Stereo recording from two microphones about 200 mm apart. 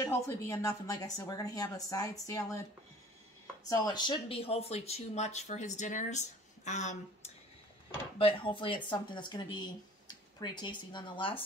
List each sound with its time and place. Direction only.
0.0 s speech: 15° left (ahead or behind)
3.6 s speech: 20° left (ahead or behind); by 7.3 s 35° left (ahead or behind)
8.2 s speech: 25° left (ahead or behind)
10.4 s speech: 20° left (ahead or behind)